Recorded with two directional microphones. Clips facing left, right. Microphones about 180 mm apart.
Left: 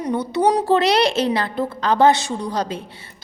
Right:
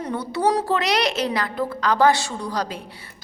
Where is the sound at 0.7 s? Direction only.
30° left (ahead or behind).